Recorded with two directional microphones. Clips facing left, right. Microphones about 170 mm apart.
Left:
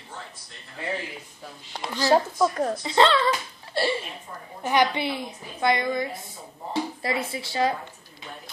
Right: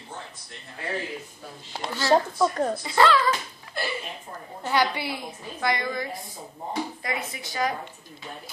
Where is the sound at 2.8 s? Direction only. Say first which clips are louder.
Left 1 dB; 25° left (ahead or behind).